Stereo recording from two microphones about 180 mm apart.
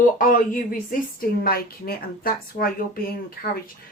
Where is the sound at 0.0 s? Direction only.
45° left (ahead or behind).